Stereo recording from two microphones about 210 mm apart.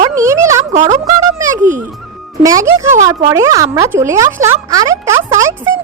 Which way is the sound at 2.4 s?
15° right (ahead or behind).